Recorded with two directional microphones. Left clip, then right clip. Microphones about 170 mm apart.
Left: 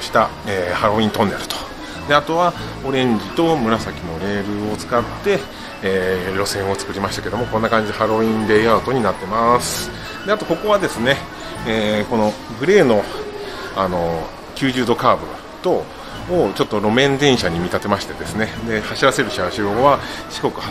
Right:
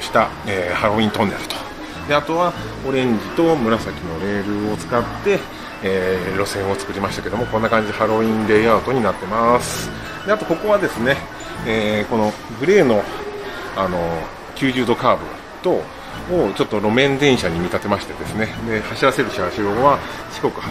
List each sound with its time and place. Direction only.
0.1 s speech: 5° right (ahead or behind)
5.9 s speech: 5° right (ahead or behind)
9.6 s speech: 30° left (ahead or behind)
10.2 s speech: centre (ahead or behind)
16.3 s speech: centre (ahead or behind)